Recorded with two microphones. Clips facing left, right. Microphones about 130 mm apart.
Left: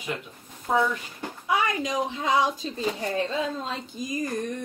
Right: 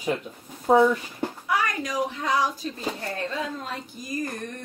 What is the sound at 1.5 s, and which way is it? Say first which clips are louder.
Speech: left 3 dB; 20° left (ahead or behind).